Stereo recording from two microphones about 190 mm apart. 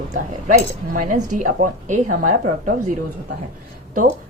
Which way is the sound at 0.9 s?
45° right (ahead or behind).